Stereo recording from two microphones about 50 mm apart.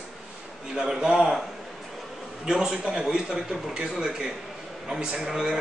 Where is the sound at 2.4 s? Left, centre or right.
Centre.